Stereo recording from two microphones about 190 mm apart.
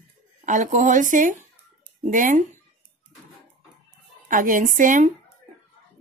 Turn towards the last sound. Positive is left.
turn(degrees=-45)  # may be behind; listen again after turning